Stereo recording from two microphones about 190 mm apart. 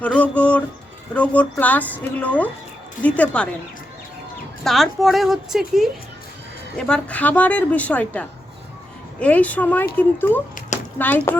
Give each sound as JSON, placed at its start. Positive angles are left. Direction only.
{"t": 0.0, "sound": "a woman's voice", "side_deg": 5}
{"t": 4.6, "sound": "a woman's voice", "side_deg": 0}